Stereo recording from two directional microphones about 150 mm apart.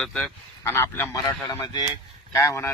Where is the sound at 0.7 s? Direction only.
15° left (ahead or behind).